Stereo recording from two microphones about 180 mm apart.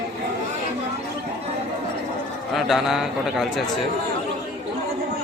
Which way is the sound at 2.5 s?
Centre (ahead or behind).